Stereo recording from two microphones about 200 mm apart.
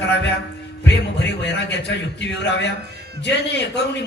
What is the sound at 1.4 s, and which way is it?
A man's voice, 60° left (ahead or behind).